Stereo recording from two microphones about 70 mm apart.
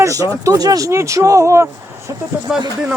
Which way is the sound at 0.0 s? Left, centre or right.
Right.